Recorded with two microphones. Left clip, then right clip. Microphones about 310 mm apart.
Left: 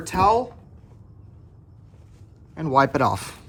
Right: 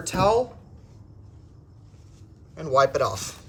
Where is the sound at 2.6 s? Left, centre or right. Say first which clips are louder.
Left 1 dB; left.